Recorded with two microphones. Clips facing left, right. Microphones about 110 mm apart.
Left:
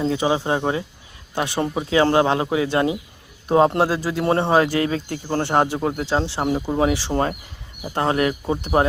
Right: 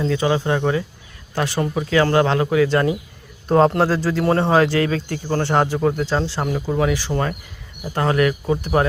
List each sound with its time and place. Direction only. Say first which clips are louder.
0.0 s speech: right 1 dB; 20° left (ahead or behind)
4.9 s speech: right 1 dB; 50° right (ahead or behind)
5.4 s speech: right 1 dB; 20° left (ahead or behind)